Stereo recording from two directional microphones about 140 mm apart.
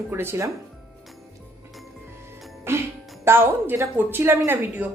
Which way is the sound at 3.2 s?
15° right (ahead or behind).